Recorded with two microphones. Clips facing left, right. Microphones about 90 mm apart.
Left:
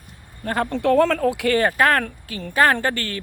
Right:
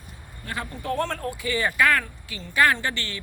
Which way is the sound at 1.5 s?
50° left (ahead or behind).